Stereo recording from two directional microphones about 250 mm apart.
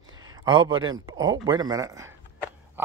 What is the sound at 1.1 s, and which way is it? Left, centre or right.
Speech, centre.